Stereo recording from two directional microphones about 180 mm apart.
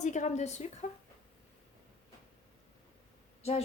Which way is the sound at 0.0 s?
40° left (ahead or behind).